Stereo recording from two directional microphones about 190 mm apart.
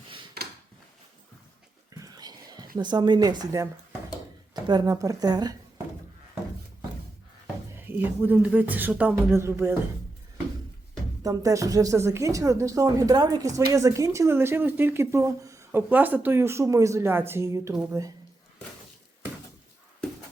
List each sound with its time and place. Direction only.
1.9 s whispering: 20° right (ahead or behind)
2.7 s speech: 25° right (ahead or behind)
7.8 s speech: 10° right (ahead or behind)
11.2 s speech: 15° right (ahead or behind)